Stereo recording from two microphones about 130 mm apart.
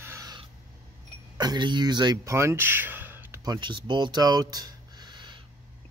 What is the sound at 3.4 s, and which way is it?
Speech, 35° right (ahead or behind).